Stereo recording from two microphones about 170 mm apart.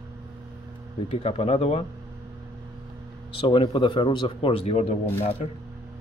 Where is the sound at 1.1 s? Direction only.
35° left (ahead or behind).